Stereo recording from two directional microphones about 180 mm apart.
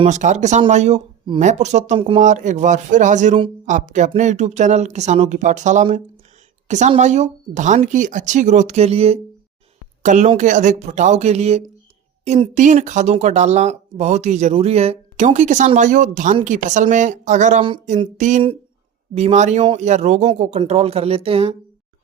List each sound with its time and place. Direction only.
0.0 s speech: 40° right (ahead or behind)